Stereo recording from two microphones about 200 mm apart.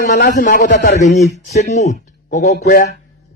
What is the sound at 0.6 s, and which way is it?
Speech, 55° left (ahead or behind).